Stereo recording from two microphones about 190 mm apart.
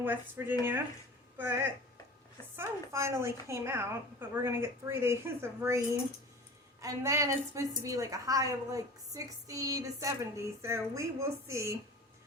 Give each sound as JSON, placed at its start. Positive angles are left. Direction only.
{"t": 0.0, "sound": "a woman's voice", "side_deg": -10}
{"t": 6.8, "sound": "a woman's voice", "side_deg": -15}